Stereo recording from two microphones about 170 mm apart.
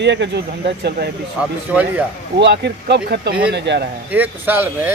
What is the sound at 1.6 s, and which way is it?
Speech, 10° right (ahead or behind).